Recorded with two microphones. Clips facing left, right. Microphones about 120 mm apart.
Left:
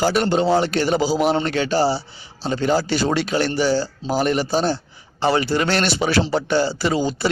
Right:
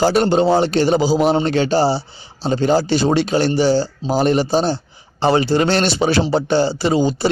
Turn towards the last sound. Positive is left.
turn(degrees=-25)  # may be behind; listen again after turning